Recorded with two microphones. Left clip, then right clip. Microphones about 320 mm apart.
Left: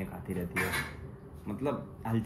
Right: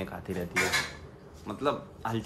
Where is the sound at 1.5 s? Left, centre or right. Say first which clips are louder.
Right 4 dB; centre.